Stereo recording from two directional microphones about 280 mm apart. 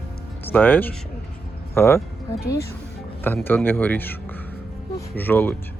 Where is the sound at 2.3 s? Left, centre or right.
Left.